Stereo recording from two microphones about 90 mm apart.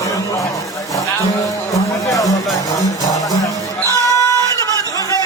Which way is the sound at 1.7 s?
40° left (ahead or behind).